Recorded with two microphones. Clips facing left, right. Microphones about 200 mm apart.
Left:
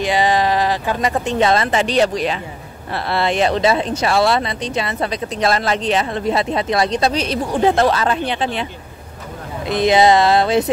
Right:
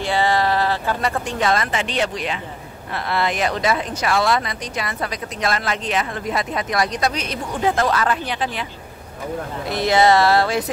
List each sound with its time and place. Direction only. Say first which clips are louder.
0.0 s speech: left 3 dB; 15° left (ahead or behind)
9.7 s speech: left 3 dB; 20° left (ahead or behind)